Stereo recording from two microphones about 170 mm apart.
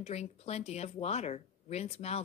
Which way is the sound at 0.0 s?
40° left (ahead or behind).